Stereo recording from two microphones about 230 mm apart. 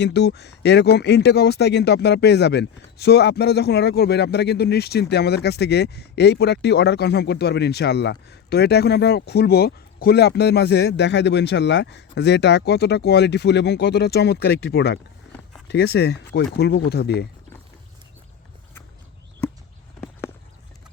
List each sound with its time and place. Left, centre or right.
0.0 s speech: left